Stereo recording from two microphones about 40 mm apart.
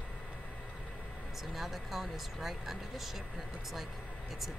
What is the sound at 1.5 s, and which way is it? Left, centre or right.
Speech, centre.